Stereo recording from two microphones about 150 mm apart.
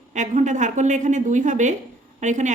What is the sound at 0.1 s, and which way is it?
A woman's voice, 55° right (ahead or behind).